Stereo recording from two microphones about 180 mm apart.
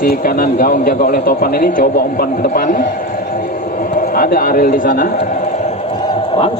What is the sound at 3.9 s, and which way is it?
A man's voice, 50° left (ahead or behind).